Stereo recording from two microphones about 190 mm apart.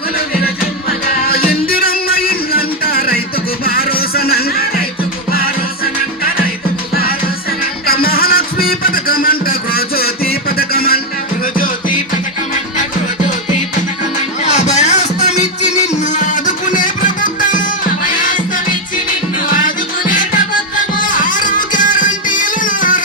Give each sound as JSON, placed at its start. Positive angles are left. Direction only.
{"t": 0.4, "sound": "music", "side_deg": 50}
{"t": 7.9, "sound": "music", "side_deg": 50}
{"t": 14.4, "sound": "music", "side_deg": 35}